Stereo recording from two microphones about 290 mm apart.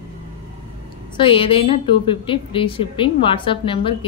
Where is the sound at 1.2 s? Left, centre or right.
Centre.